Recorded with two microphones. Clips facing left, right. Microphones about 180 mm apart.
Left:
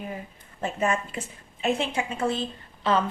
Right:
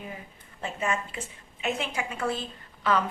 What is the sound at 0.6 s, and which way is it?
Speech, 40° left (ahead or behind).